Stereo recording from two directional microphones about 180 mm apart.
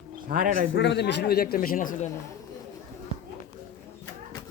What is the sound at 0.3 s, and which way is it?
Speech, 50° right (ahead or behind).